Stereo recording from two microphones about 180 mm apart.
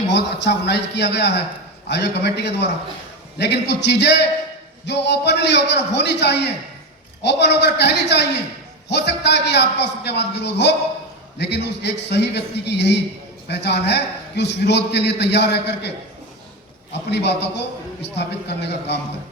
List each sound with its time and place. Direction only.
0.1 s a man's voice: 75° left (ahead or behind)
16.9 s a man's voice: 70° left (ahead or behind)